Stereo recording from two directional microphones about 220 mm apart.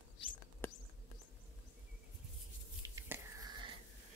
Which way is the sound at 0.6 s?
10° left (ahead or behind).